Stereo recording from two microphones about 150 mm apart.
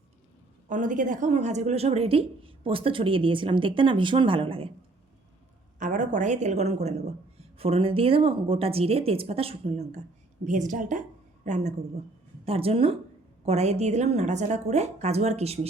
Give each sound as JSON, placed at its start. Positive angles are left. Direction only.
{"t": 0.7, "sound": "a woman's voice", "side_deg": -60}
{"t": 5.8, "sound": "a woman's voice", "side_deg": -60}
{"t": 10.4, "sound": "a woman's voice", "side_deg": -55}
{"t": 12.5, "sound": "a woman's voice", "side_deg": -40}